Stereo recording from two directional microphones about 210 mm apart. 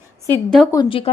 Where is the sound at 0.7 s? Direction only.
20° left (ahead or behind).